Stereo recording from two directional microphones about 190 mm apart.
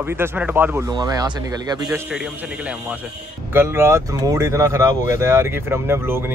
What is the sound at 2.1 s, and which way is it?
Speech, 5° right (ahead or behind).